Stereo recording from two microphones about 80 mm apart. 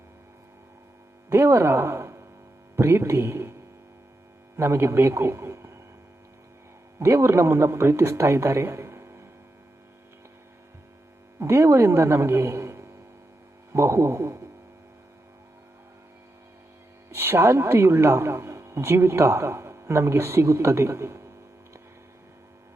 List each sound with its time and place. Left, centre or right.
1.3 s a man's voice: right
4.5 s speech: right
7.0 s speech: right
11.3 s a man's voice: right
17.2 s speech: right